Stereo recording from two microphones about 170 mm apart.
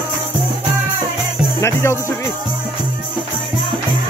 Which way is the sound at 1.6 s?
15° left (ahead or behind).